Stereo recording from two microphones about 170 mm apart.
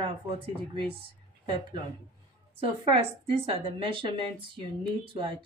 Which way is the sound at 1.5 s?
25° right (ahead or behind).